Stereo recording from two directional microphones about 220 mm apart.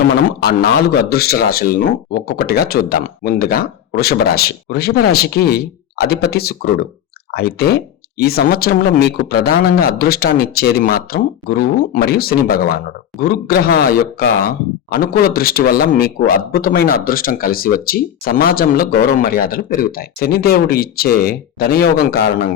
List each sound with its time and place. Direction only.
0.3 s a man's voice: 45° left (ahead or behind)